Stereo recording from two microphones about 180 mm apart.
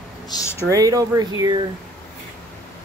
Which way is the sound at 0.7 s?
20° right (ahead or behind).